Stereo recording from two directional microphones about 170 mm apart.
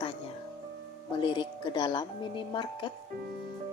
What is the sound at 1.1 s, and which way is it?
A woman's voice, 30° left (ahead or behind).